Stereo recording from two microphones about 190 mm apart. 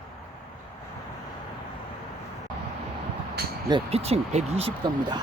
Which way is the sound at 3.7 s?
35° right (ahead or behind).